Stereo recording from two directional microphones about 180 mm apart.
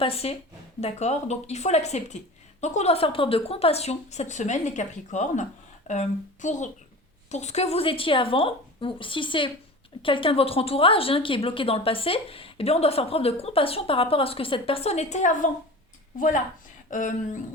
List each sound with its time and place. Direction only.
0.0 s a woman's voice: 35° left (ahead or behind)
16.9 s a woman's voice: 45° left (ahead or behind)